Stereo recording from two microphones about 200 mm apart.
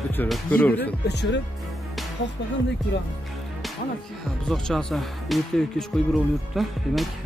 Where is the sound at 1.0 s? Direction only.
60° left (ahead or behind).